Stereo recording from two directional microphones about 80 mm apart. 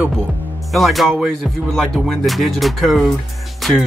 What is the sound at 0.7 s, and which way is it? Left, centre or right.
Music, centre.